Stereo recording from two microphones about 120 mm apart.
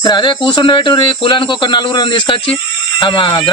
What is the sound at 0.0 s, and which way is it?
A man's voice, 40° left (ahead or behind).